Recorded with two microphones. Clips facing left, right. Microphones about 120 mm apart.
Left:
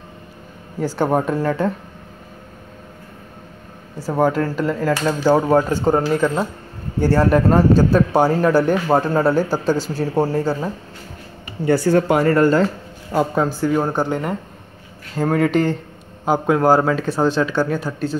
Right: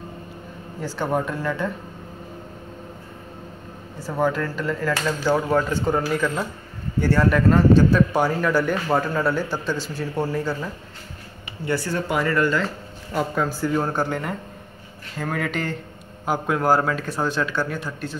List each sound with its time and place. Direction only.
0.8 s speech: 40° left (ahead or behind)
4.0 s speech: 40° left (ahead or behind)
11.6 s speech: 45° left (ahead or behind)
13.1 s speech: 25° left (ahead or behind)
15.1 s speech: 35° left (ahead or behind)